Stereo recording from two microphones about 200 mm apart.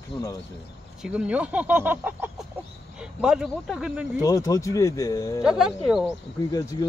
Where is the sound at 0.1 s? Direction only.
20° left (ahead or behind).